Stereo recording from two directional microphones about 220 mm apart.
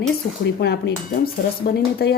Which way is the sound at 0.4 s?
50° left (ahead or behind).